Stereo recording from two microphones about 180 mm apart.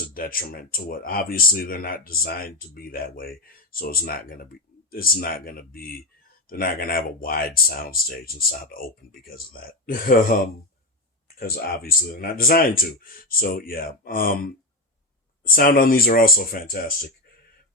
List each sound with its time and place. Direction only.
0.1 s speech: 55° left (ahead or behind)
11.3 s speech: 55° left (ahead or behind)